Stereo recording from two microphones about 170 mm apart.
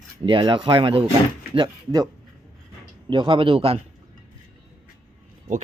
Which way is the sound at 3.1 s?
30° right (ahead or behind).